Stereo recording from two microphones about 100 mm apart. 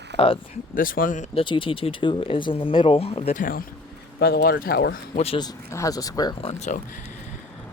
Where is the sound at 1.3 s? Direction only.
55° left (ahead or behind); by 3.4 s 75° left (ahead or behind).